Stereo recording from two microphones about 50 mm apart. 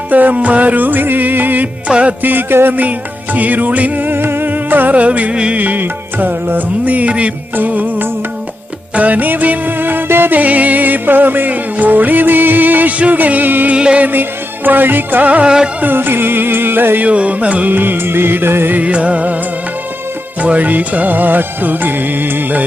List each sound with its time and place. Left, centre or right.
0.1 s music: right
1.9 s music: right
2.2 s music: right
3.3 s music: right
5.5 s music: right
7.5 s music: right
13.7 s music: centre
14.0 s music: right
15.4 s music: centre
15.8 s music: right
17.1 s music: right
17.7 s music: right
18.7 s music: right
20.4 s music: right